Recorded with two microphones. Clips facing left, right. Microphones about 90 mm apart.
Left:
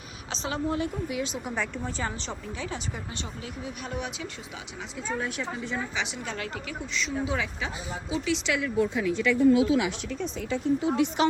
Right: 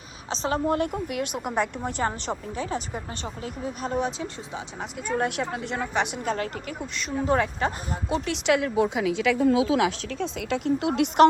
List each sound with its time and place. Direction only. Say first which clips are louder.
0.3 s a woman's voice: right 5 dB; 40° right (ahead or behind)
2.0 s speech: right 5 dB; 40° right (ahead or behind)
5.0 s a woman's voice: right 5 dB; 85° right